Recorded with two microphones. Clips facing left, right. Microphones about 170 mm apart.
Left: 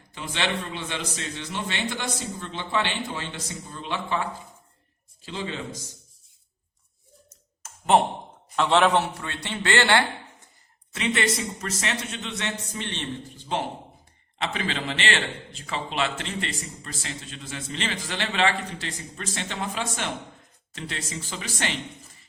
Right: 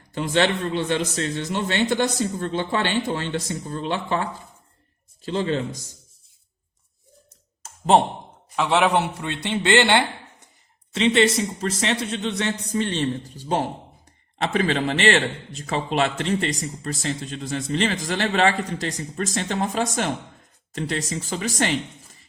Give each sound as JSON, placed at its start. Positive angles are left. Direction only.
{"t": 0.1, "sound": "a man's voice", "side_deg": -45}
{"t": 7.3, "sound": "a sound", "side_deg": -30}
{"t": 8.5, "sound": "a man's voice", "side_deg": -5}
{"t": 14.3, "sound": "a man's voice", "side_deg": -40}